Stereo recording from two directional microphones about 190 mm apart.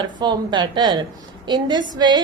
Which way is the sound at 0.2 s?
25° right (ahead or behind).